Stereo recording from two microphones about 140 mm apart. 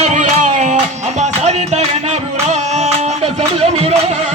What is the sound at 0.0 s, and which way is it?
Music, 60° right (ahead or behind).